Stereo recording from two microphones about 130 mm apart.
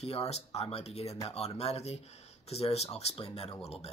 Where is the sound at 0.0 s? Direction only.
50° left (ahead or behind).